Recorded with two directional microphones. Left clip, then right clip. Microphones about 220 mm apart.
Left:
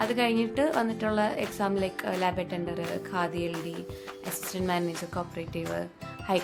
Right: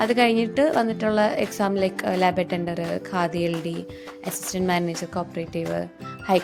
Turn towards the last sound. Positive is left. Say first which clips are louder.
# right 7 dB
turn(degrees=-25)  # may be behind; listen again after turning